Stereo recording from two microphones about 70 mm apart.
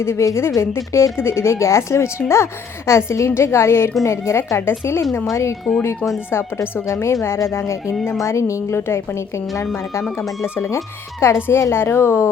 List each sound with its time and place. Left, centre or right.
0.0 s a woman's voice: left
10.4 s a woman's voice: left
10.8 s a woman's voice: left
11.3 s a woman's voice: left